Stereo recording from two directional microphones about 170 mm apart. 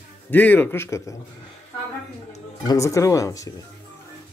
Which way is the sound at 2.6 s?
20° left (ahead or behind).